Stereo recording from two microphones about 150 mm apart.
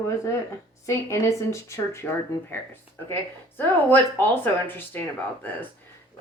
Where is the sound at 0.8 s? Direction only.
20° left (ahead or behind).